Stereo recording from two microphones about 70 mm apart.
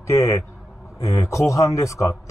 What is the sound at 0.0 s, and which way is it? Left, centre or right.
Speech, left.